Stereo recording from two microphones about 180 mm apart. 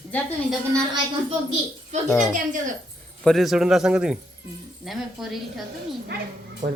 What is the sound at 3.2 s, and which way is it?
Speech, centre (ahead or behind).